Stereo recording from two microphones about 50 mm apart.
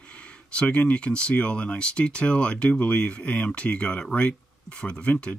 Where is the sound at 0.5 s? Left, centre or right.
Left.